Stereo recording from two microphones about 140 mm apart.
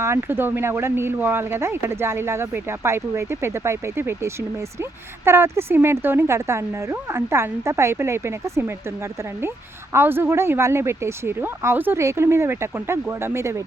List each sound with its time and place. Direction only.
0.0 s speech: 20° right (ahead or behind)
9.9 s speech: 15° right (ahead or behind)